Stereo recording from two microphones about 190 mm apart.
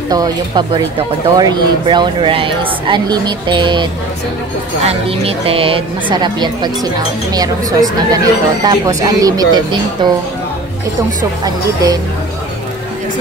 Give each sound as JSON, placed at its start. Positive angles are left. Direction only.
{"t": 0.1, "sound": "speech", "side_deg": -20}
{"t": 4.8, "sound": "speech", "side_deg": -30}
{"t": 11.4, "sound": "speech", "side_deg": -20}